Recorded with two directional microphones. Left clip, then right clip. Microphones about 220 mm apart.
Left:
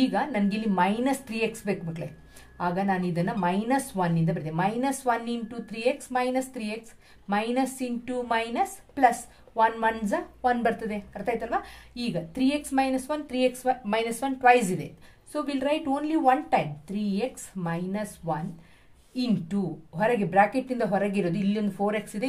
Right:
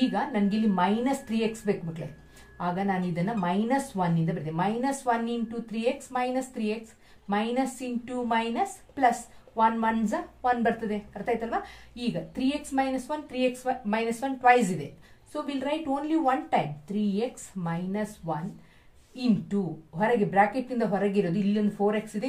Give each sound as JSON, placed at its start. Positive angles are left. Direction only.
{"t": 0.1, "sound": "a woman's voice", "side_deg": 45}
{"t": 19.5, "sound": "a woman's voice", "side_deg": 45}